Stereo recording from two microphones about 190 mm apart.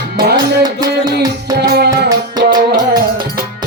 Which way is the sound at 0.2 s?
55° right (ahead or behind).